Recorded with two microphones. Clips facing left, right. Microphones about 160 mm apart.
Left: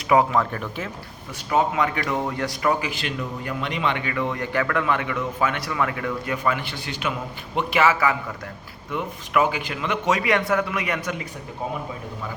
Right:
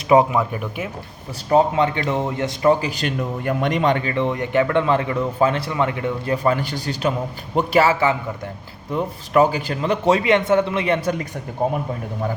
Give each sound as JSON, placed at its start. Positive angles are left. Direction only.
{"t": 0.3, "sound": "speech", "side_deg": -10}
{"t": 1.5, "sound": "speech", "side_deg": -30}
{"t": 2.9, "sound": "a man's voice", "side_deg": -45}
{"t": 11.6, "sound": "speech", "side_deg": -50}